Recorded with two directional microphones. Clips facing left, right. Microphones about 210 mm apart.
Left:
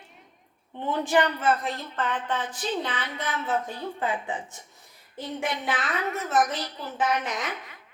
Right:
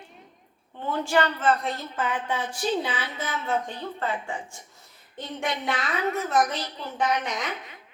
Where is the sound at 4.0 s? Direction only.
15° left (ahead or behind).